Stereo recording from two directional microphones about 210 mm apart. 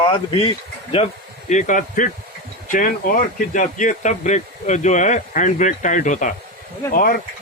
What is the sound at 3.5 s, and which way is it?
A man's voice, 35° left (ahead or behind).